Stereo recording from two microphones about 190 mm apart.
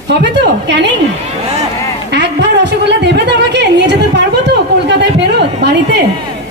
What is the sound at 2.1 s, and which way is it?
A woman's voice, 65° right (ahead or behind).